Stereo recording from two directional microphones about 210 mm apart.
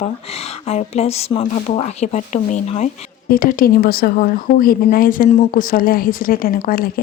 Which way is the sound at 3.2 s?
40° left (ahead or behind).